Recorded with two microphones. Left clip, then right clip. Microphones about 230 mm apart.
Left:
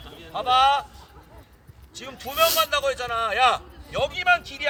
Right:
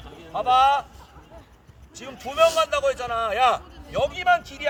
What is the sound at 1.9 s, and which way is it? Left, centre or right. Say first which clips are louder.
A man's voice: right 2 dB; centre.